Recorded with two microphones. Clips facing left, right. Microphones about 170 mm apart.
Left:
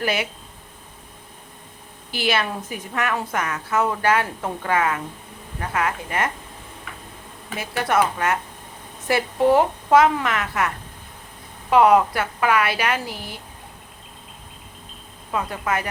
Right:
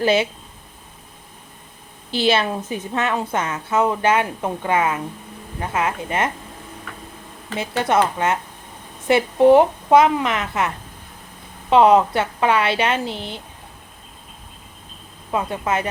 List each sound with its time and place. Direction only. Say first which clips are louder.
0.0 s a woman's voice: right 7 dB; 25° right (ahead or behind)
2.0 s a woman's voice: right 5 dB; 25° right (ahead or behind)
7.5 s a woman's voice: right 3 dB; 20° right (ahead or behind)
11.7 s a woman's voice: right 2 dB; 25° right (ahead or behind)
15.3 s a woman's voice: right 3 dB; 20° right (ahead or behind)